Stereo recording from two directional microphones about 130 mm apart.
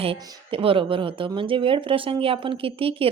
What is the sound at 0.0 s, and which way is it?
Speech, 45° right (ahead or behind).